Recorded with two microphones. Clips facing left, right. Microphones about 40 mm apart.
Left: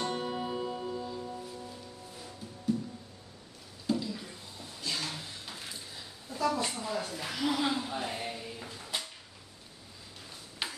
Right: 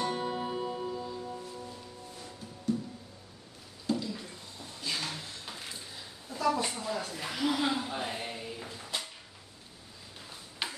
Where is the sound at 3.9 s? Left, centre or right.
Centre.